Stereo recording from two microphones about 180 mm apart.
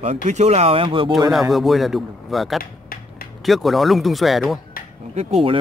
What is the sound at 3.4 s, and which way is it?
A man's voice, centre (ahead or behind).